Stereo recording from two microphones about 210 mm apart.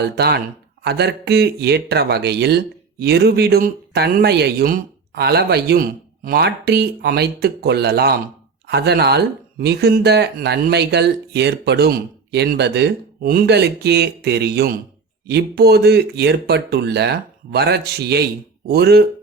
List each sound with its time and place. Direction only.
0.0 s speech: 50° right (ahead or behind)